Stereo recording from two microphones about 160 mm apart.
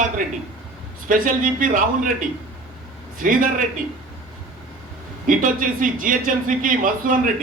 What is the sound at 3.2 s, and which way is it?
Speech, 60° right (ahead or behind).